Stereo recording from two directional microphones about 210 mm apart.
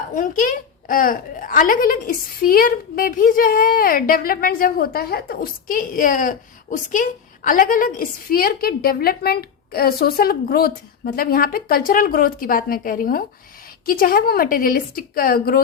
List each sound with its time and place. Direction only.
0.1 s a woman's voice: 40° left (ahead or behind)